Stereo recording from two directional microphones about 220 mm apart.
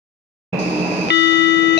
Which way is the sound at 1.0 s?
55° left (ahead or behind).